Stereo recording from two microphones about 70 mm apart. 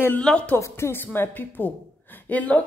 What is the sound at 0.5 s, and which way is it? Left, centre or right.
A woman's voice, left.